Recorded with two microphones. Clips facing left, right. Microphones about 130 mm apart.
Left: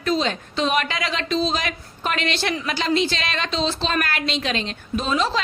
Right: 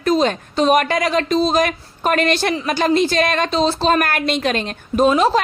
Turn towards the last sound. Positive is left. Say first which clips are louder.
# right 8 dB
turn(degrees=-45)  # may be behind; listen again after turning